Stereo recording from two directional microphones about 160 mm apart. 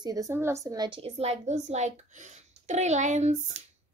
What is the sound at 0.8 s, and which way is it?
A woman's voice, 35° right (ahead or behind).